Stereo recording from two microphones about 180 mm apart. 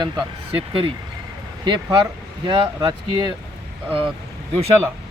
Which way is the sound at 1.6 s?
25° right (ahead or behind).